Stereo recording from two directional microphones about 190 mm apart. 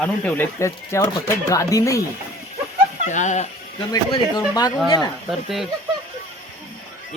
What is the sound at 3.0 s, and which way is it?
Speech, 40° left (ahead or behind).